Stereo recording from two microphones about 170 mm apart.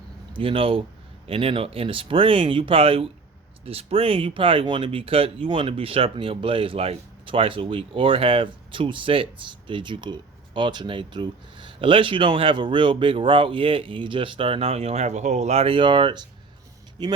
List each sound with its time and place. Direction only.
0.3 s speech: 30° right (ahead or behind)